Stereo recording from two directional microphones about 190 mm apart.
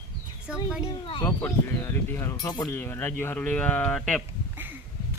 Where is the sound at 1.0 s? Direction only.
25° left (ahead or behind).